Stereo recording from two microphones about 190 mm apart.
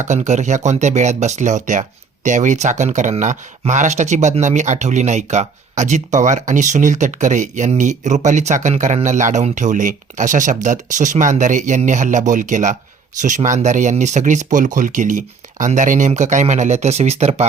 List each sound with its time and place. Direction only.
0.0 s speech: 40° right (ahead or behind)